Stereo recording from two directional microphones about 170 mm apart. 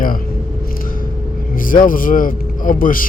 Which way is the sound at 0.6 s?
55° left (ahead or behind).